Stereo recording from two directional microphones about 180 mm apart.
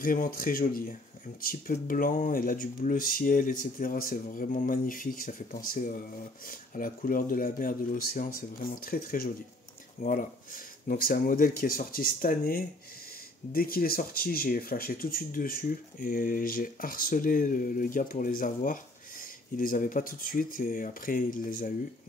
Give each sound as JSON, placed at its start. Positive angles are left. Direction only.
{"t": 0.0, "sound": "speech", "side_deg": 50}